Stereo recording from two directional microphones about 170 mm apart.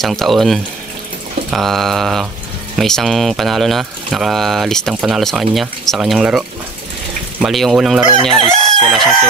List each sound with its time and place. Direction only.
0.0 s speech: centre (ahead or behind)
7.4 s speech: centre (ahead or behind)
8.0 s chicken: 30° right (ahead or behind)
8.6 s chicken: centre (ahead or behind)